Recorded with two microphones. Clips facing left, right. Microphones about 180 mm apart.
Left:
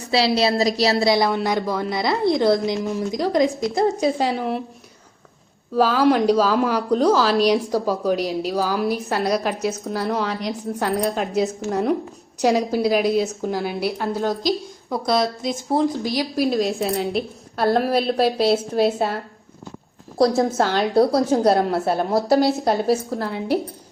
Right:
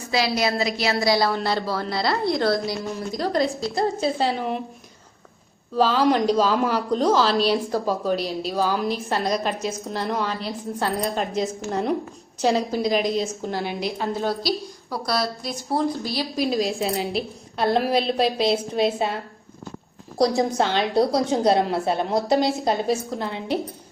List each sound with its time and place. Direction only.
0.0 s a woman's voice: 30° left (ahead or behind)
1.0 s a woman's voice: 20° left (ahead or behind); by 4.6 s 5° left (ahead or behind)
5.7 s a woman's voice: 10° left (ahead or behind)
20.1 s a woman's voice: centre (ahead or behind)